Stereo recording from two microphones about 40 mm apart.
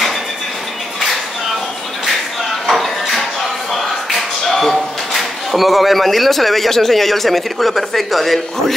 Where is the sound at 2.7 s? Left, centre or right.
Centre.